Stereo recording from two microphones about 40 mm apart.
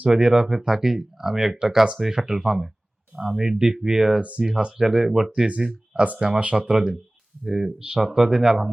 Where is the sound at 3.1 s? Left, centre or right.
Right.